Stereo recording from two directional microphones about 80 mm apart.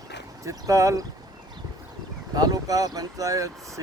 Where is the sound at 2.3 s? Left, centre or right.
Right.